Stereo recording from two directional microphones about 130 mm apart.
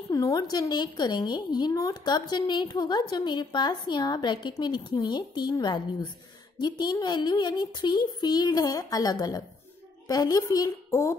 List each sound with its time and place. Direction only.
0.1 s a woman's voice: 30° left (ahead or behind)